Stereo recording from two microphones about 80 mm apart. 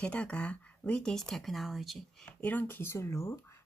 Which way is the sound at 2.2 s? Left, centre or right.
Centre.